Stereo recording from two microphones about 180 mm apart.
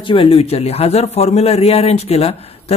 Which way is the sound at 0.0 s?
30° left (ahead or behind).